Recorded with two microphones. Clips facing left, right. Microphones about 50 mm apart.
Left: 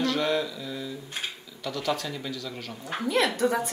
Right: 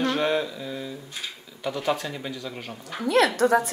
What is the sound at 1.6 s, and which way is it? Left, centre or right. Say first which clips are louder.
Speech: right 3 dB; right.